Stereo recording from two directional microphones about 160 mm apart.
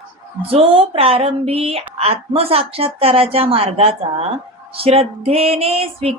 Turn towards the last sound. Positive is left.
turn(degrees=-40)  # may be behind; listen again after turning